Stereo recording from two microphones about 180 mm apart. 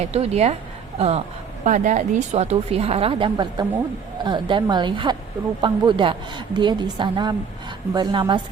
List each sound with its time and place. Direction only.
0.0 s a woman's voice: 35° right (ahead or behind)